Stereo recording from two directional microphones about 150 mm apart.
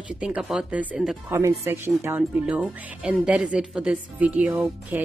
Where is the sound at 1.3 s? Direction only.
15° right (ahead or behind).